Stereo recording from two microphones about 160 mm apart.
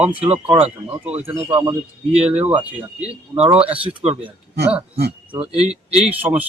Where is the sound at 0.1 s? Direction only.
35° right (ahead or behind).